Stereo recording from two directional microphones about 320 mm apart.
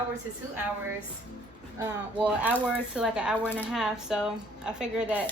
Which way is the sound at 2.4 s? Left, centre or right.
Centre.